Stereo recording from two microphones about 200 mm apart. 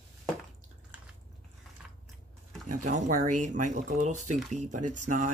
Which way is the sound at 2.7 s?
40° right (ahead or behind).